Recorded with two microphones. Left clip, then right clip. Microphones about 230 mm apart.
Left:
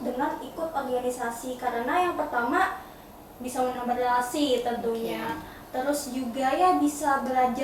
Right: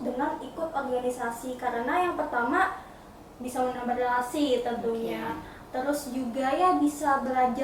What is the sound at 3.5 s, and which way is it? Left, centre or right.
A woman's voice, centre.